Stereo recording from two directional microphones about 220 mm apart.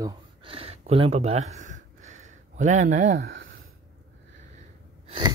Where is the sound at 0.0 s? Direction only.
25° right (ahead or behind).